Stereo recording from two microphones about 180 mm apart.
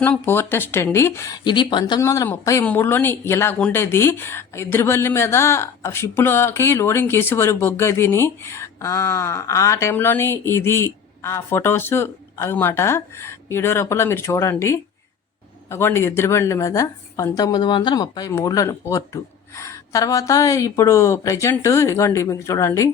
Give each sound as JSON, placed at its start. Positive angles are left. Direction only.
{"t": 0.0, "sound": "speech", "side_deg": 10}